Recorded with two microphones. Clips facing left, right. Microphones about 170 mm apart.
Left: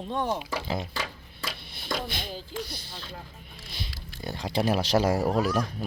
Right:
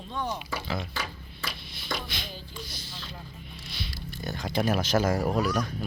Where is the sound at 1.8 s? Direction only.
50° left (ahead or behind).